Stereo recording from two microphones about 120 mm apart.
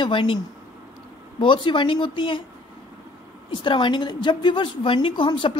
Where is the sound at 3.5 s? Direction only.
40° left (ahead or behind).